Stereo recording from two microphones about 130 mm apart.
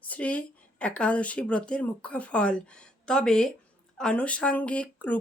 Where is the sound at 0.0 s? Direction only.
10° left (ahead or behind).